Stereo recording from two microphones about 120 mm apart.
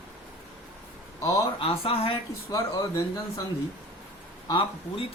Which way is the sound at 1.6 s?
50° left (ahead or behind).